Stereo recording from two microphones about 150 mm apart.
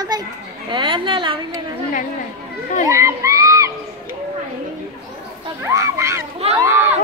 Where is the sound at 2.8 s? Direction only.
20° right (ahead or behind).